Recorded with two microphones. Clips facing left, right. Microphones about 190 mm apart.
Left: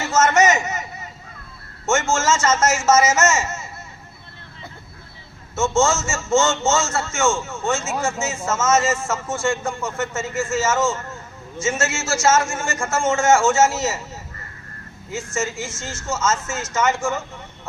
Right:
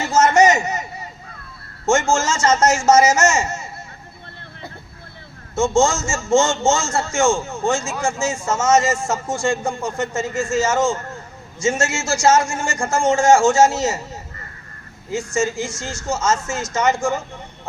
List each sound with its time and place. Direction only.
0.0 s a sound: 35° right (ahead or behind)
1.9 s a man's voice: 30° right (ahead or behind)
5.7 s a man's voice: 35° right (ahead or behind)
15.1 s a man's voice: 30° right (ahead or behind)